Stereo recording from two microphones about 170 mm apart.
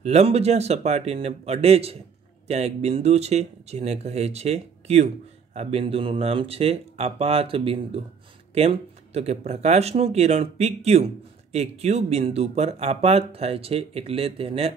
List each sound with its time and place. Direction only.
0.0 s speech: 40° right (ahead or behind)